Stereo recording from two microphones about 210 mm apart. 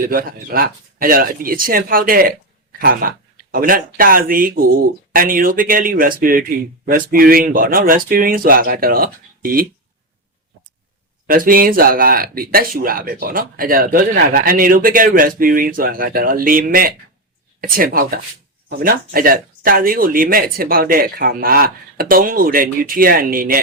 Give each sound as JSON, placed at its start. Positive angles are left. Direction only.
{"t": 0.1, "sound": "speech", "side_deg": -45}
{"t": 11.3, "sound": "speech", "side_deg": -40}